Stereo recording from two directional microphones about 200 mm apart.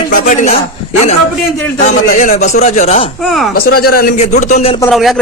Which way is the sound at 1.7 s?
40° left (ahead or behind).